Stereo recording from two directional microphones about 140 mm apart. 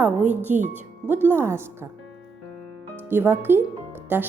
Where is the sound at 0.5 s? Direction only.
65° right (ahead or behind).